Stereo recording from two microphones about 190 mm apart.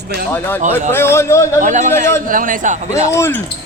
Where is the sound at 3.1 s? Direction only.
15° left (ahead or behind).